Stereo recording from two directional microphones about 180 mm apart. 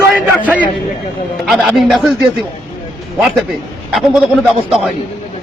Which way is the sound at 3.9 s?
5° right (ahead or behind).